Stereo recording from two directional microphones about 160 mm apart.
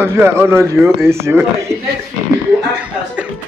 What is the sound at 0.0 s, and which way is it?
Speech, 15° right (ahead or behind).